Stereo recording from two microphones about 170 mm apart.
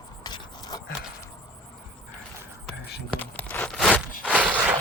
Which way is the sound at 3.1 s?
10° left (ahead or behind).